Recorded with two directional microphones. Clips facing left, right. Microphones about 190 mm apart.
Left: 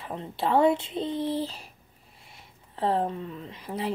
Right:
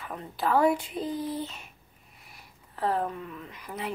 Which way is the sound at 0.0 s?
25° left (ahead or behind).